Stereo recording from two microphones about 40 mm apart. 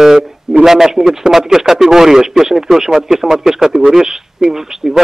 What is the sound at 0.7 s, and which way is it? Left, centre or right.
A man's voice, centre.